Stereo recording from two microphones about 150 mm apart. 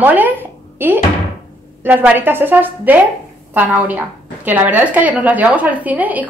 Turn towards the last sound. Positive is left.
turn(degrees=-10)  # may be behind; listen again after turning